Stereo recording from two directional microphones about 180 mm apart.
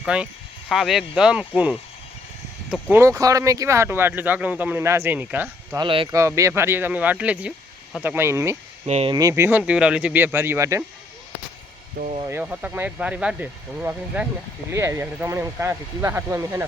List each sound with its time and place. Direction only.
0.0 s speech: 5° right (ahead or behind)
2.9 s speech: 15° right (ahead or behind)
5.8 s speech: 30° right (ahead or behind)
6.1 s speech: 15° right (ahead or behind)
8.9 s speech: 35° right (ahead or behind)
9.1 s speech: 15° right (ahead or behind)
12.2 s speech: 10° right (ahead or behind)